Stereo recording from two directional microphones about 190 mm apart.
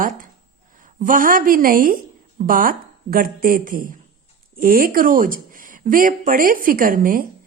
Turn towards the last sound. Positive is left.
turn(degrees=-45)  # may be behind; listen again after turning